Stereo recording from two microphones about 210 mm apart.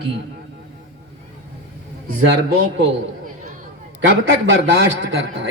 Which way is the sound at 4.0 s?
55° right (ahead or behind).